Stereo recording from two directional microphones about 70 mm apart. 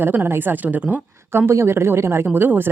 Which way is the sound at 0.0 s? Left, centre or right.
Right.